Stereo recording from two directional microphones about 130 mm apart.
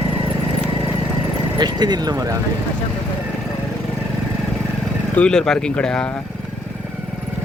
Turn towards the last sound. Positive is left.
turn(degrees=5)  # may be behind; listen again after turning